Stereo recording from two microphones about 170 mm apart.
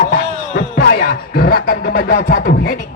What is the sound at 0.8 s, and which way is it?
Music, 65° left (ahead or behind).